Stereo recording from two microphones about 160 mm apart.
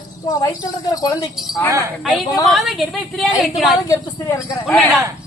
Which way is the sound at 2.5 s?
Centre (ahead or behind).